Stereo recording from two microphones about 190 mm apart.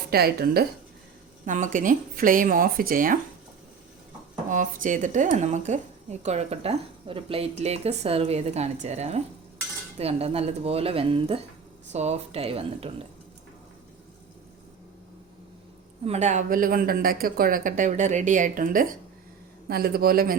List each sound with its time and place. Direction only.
0.1 s a woman's voice: 55° right (ahead or behind)
1.5 s speech: 40° right (ahead or behind)
4.5 s a woman's voice: 45° right (ahead or behind)
16.0 s speech: 35° right (ahead or behind); by 20.3 s 50° right (ahead or behind)